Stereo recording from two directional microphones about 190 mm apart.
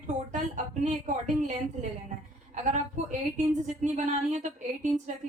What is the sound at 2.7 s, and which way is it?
A woman's voice, 40° right (ahead or behind).